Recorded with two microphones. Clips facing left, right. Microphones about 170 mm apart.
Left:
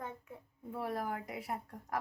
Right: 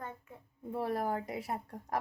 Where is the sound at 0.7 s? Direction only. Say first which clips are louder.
Right 4 dB; 30° right (ahead or behind).